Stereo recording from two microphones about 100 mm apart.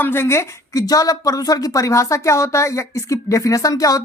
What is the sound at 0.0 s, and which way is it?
A woman's voice, 25° left (ahead or behind).